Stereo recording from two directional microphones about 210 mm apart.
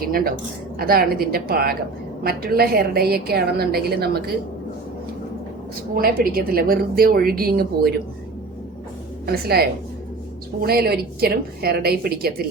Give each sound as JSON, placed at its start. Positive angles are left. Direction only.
{"t": 0.0, "sound": "a woman's voice", "side_deg": -45}
{"t": 5.9, "sound": "a woman's voice", "side_deg": -45}
{"t": 9.2, "sound": "a woman's voice", "side_deg": -50}